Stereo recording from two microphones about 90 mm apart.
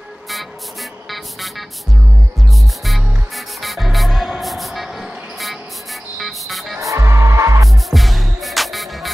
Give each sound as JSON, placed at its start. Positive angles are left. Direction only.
{"t": 2.8, "sound": "music", "side_deg": 0}
{"t": 6.1, "sound": "vehicle", "side_deg": 0}
{"t": 6.8, "sound": "music", "side_deg": -35}
{"t": 7.9, "sound": "music", "side_deg": 0}